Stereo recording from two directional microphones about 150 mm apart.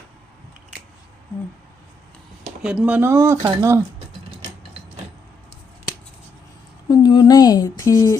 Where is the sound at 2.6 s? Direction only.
5° right (ahead or behind).